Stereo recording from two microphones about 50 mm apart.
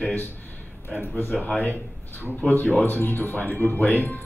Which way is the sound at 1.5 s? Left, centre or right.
Left.